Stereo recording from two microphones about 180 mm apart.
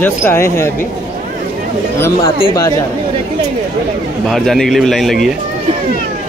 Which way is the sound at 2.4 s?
20° left (ahead or behind).